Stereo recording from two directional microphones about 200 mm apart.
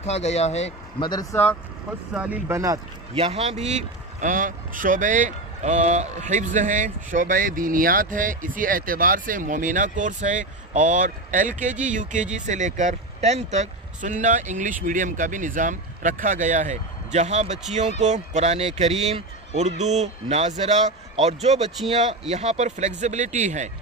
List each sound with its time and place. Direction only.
0.0 s speech: 35° left (ahead or behind)
2.1 s speech: 5° right (ahead or behind)
3.2 s a man's voice: 30° right (ahead or behind)